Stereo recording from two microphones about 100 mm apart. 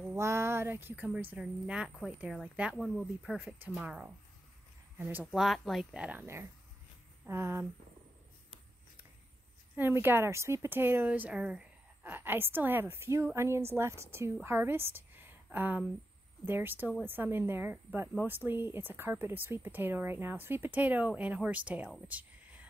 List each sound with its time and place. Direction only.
0.1 s speech: 25° right (ahead or behind)
1.4 s speech: 5° right (ahead or behind)
2.7 s speech: 5° left (ahead or behind)
3.7 s speech: 10° right (ahead or behind)
4.9 s speech: 20° right (ahead or behind)
5.2 s speech: 5° right (ahead or behind)
5.9 s speech: 15° right (ahead or behind)
7.2 s speech: 25° right (ahead or behind)
9.8 s a woman's voice: 20° right (ahead or behind)
22.0 s a sound: 15° right (ahead or behind)